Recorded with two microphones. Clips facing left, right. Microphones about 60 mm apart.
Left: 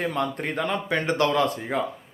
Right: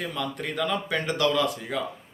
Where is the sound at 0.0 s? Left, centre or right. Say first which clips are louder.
Left 4 dB; left.